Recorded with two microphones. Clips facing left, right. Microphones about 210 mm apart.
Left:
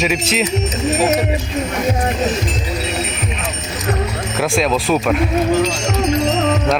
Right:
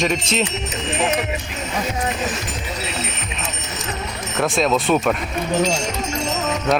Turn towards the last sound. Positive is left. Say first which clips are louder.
# left 1 dB
turn(degrees=5)  # may be behind; listen again after turning